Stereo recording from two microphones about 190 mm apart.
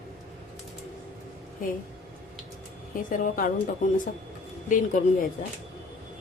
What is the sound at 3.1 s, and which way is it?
A woman's voice, 45° left (ahead or behind).